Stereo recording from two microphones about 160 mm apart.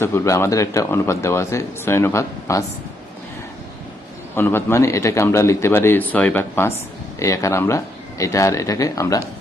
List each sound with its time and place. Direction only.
0.0 s speech: 15° left (ahead or behind)
4.4 s speech: 15° left (ahead or behind)